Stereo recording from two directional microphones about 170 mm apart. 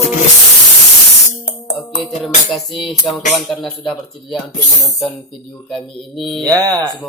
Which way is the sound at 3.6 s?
Centre (ahead or behind).